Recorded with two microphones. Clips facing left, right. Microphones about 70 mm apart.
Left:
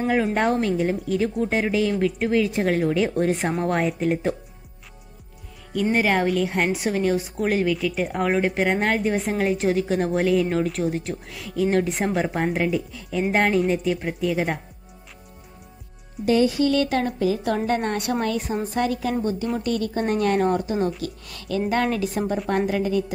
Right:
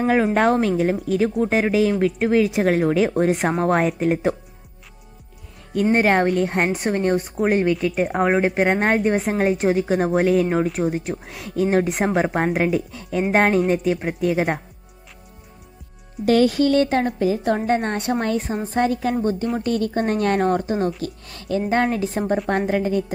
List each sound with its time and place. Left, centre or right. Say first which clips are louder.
0.0 s a woman's voice: right 4 dB; right
5.8 s a woman's voice: right 4 dB; right
10.8 s a woman's voice: right 2 dB; right
16.3 s a woman's voice: right 3 dB; right